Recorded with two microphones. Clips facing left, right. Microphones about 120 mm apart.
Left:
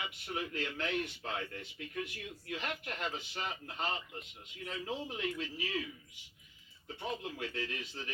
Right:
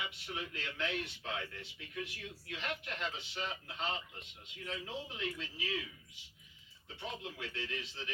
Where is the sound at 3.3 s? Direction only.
50° left (ahead or behind).